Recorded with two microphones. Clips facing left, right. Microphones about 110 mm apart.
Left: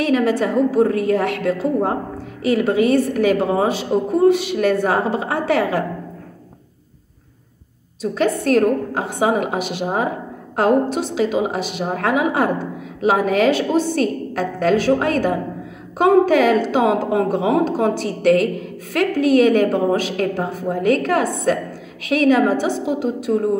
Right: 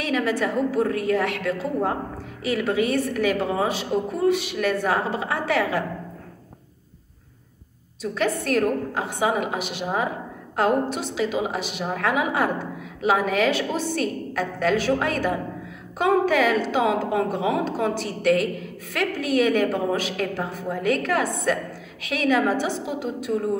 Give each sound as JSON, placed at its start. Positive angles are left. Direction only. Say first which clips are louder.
{"t": 0.0, "sound": "a woman's voice", "louder": "left 6 dB", "side_deg": 40}
{"t": 8.0, "sound": "a woman's voice", "louder": "left 6 dB", "side_deg": 35}